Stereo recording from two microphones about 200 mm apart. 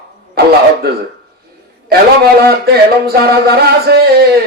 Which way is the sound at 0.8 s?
50° right (ahead or behind).